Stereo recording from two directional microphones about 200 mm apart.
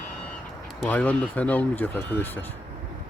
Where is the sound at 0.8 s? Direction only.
5° left (ahead or behind).